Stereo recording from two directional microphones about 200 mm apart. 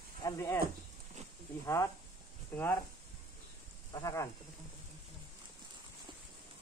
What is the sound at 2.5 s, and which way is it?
Speech, 10° left (ahead or behind).